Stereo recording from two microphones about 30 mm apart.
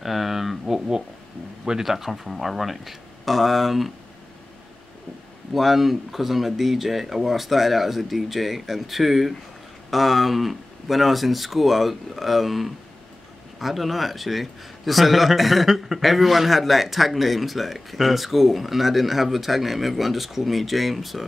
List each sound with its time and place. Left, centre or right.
0.0 s a sound: centre
1.9 s a man's voice: centre
5.5 s a man's voice: centre